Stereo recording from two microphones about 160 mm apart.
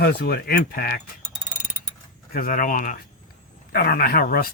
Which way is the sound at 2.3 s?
60° left (ahead or behind).